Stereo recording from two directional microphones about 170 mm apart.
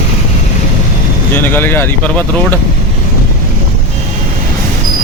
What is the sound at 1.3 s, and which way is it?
Speech, 10° left (ahead or behind).